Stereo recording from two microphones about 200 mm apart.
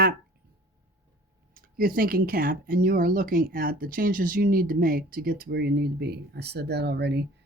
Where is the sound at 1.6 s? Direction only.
45° right (ahead or behind).